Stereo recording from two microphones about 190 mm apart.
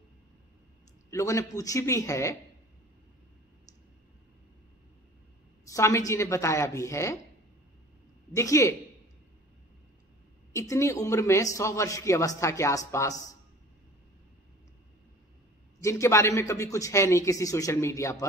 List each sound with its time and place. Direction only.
1.1 s speech: 15° left (ahead or behind)
5.7 s speech: 15° left (ahead or behind)
8.4 s speech: 15° left (ahead or behind)
10.5 s speech: 15° left (ahead or behind)
15.8 s speech: 15° left (ahead or behind)